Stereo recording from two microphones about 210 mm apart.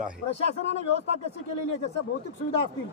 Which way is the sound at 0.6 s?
30° right (ahead or behind).